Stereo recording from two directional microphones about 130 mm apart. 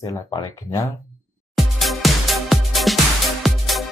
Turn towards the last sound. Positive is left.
turn(degrees=0)  # may be behind; listen again after turning